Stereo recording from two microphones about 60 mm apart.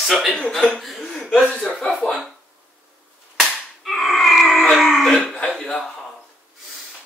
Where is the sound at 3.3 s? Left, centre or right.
Centre.